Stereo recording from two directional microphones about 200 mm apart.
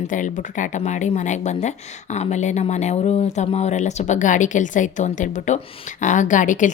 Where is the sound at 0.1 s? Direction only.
40° left (ahead or behind).